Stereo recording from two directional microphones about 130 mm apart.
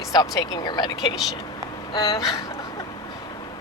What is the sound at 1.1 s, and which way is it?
Speech, 5° right (ahead or behind).